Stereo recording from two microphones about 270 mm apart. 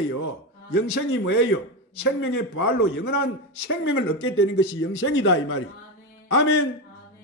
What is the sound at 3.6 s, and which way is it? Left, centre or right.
A man's voice, left.